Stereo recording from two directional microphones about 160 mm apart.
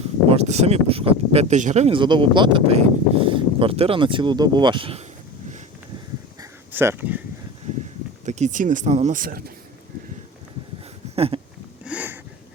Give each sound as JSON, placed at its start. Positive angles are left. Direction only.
{"t": 0.3, "sound": "speech", "side_deg": -45}
{"t": 1.9, "sound": "speech", "side_deg": -30}
{"t": 6.7, "sound": "speech", "side_deg": -10}
{"t": 8.2, "sound": "speech", "side_deg": -45}
{"t": 11.1, "sound": "a sound", "side_deg": -40}
{"t": 11.9, "sound": "a sound", "side_deg": -10}